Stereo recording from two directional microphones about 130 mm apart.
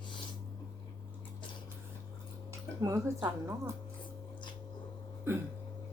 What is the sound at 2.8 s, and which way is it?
Speech, 20° right (ahead or behind).